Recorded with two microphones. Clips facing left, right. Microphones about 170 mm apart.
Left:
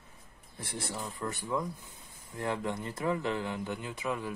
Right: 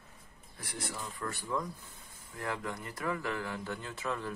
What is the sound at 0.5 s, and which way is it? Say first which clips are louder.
Speech: left 3 dB; 30° left (ahead or behind).